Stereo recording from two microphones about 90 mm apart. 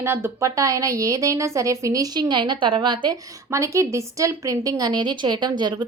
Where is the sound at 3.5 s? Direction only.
35° right (ahead or behind).